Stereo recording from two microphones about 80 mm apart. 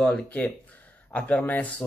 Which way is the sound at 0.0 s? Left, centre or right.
Centre.